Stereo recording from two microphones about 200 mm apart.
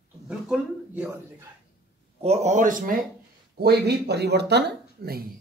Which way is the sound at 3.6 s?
55° right (ahead or behind).